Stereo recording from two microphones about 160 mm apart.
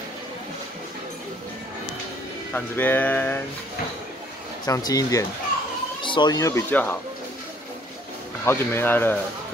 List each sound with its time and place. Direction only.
2.5 s speech: 10° left (ahead or behind)
4.6 s speech: 25° left (ahead or behind)
8.5 s speech: 15° left (ahead or behind)